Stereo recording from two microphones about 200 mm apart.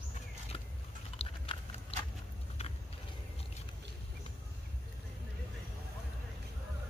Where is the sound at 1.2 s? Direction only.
30° left (ahead or behind).